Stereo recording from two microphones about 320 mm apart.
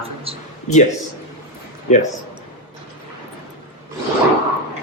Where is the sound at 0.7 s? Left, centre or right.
Left.